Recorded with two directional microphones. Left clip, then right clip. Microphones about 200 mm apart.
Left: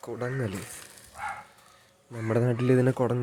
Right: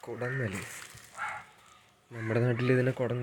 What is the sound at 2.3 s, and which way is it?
Speech, 10° left (ahead or behind).